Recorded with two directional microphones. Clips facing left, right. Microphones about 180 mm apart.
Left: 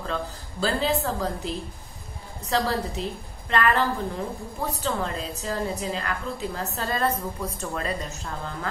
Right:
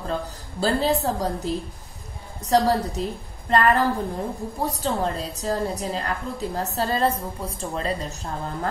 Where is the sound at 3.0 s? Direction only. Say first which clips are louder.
Right 3 dB; 40° right (ahead or behind).